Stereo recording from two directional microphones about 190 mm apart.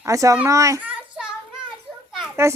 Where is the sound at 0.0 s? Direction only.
15° right (ahead or behind).